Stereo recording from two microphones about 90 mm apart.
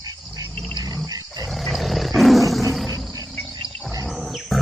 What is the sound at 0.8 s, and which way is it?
Roar, 40° right (ahead or behind).